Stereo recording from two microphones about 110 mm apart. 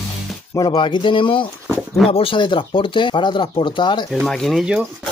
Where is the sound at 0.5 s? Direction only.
45° left (ahead or behind).